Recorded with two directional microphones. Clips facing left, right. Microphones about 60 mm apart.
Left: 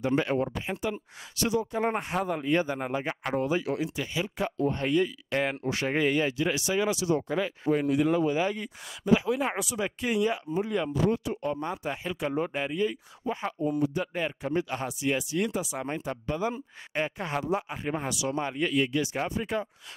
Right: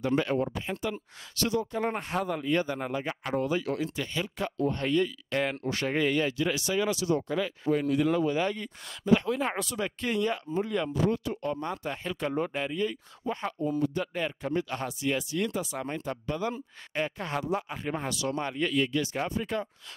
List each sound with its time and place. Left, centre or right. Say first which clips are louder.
0.0 s speech: left 1 dB; centre